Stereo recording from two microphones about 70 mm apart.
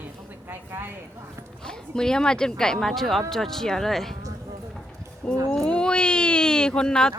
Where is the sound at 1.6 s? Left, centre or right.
Centre.